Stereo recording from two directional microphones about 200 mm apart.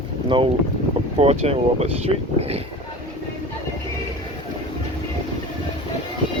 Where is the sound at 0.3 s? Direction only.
25° right (ahead or behind).